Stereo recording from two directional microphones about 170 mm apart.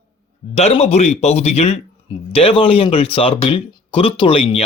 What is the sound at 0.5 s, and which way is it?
Speech, 35° left (ahead or behind).